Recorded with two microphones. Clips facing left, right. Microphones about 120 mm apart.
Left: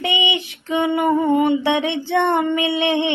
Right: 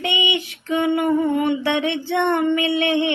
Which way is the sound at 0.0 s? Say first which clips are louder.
Left 1 dB; 25° left (ahead or behind).